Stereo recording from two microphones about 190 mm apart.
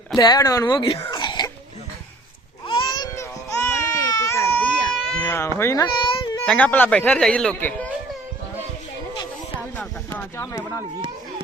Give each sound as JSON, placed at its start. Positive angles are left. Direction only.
{"t": 0.2, "sound": "speech", "side_deg": 20}
{"t": 2.6, "sound": "baby cry", "side_deg": 25}
{"t": 6.4, "sound": "speech", "side_deg": 5}
{"t": 9.7, "sound": "a sound", "side_deg": 15}